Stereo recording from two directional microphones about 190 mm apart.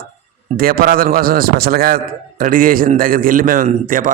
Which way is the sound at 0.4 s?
50° right (ahead or behind).